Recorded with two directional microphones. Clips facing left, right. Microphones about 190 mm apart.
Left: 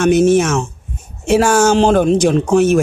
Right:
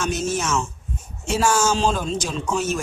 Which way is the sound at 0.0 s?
60° left (ahead or behind).